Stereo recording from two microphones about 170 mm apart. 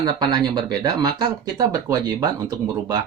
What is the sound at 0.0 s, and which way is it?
Speech, 25° right (ahead or behind).